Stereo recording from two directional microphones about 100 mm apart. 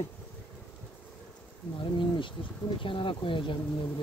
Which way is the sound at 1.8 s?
55° left (ahead or behind).